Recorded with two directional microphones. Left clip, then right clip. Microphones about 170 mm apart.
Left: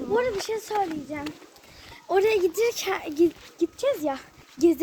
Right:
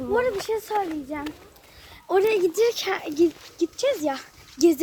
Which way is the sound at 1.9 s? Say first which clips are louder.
Right 1 dB; 55° right (ahead or behind).